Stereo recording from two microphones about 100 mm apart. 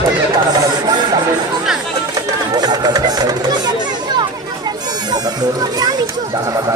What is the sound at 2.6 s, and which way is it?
Speech, 45° right (ahead or behind).